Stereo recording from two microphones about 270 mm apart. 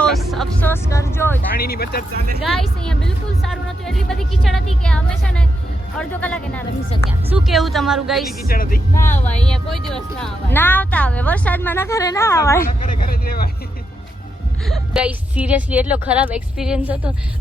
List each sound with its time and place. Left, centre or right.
0.0 s speech: centre
1.5 s speech: left
2.1 s speech: right
2.4 s speech: centre
8.4 s speech: left
9.0 s speech: centre
12.8 s speech: left
14.7 s speech: centre